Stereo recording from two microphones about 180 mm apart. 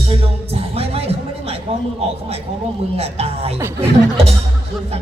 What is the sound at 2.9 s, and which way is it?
Speech, 35° right (ahead or behind).